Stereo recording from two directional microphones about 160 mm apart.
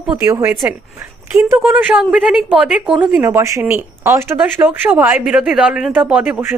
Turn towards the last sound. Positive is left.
turn(degrees=-10)  # may be behind; listen again after turning